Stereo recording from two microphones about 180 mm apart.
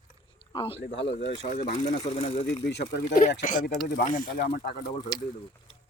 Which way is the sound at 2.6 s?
70° left (ahead or behind).